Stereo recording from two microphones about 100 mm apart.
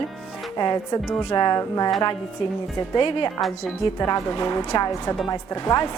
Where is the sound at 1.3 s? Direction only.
45° left (ahead or behind).